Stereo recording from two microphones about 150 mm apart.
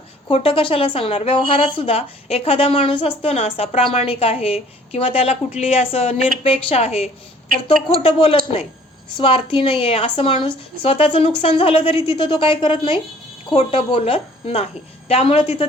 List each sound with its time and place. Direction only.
0.3 s a woman's voice: 40° left (ahead or behind)